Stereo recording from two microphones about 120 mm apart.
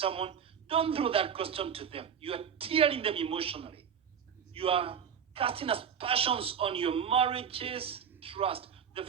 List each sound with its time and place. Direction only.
0.0 s a man's voice: 50° right (ahead or behind)